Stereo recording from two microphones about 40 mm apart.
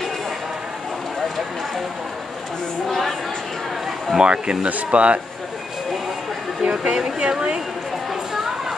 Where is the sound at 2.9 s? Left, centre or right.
Centre.